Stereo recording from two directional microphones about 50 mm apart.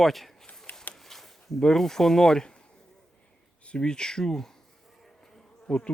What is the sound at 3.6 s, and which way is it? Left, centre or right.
Speech, centre.